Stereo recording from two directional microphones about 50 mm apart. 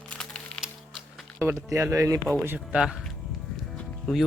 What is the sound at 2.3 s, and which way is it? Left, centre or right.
Speech, centre.